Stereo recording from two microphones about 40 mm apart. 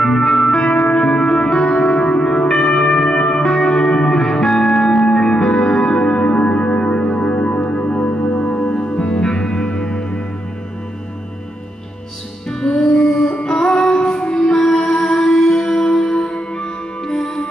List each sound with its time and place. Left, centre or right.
0.0 s music: centre
3.4 s music: centre
5.1 s music: centre
12.4 s music: centre
14.8 s music: centre